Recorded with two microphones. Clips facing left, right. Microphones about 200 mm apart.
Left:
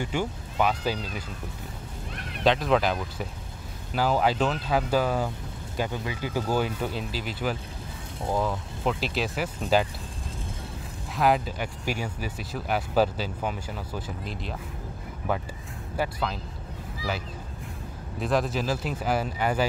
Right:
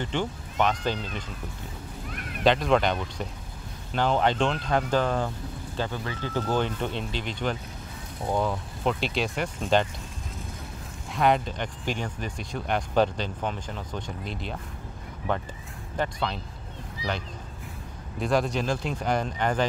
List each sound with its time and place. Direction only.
0.0 s speech: 10° left (ahead or behind)
2.4 s speech: centre (ahead or behind)
11.1 s speech: 5° left (ahead or behind)
16.0 s speech: 5° left (ahead or behind)
18.2 s speech: centre (ahead or behind)